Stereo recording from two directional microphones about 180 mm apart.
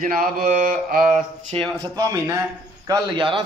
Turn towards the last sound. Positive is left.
turn(degrees=-25)  # may be behind; listen again after turning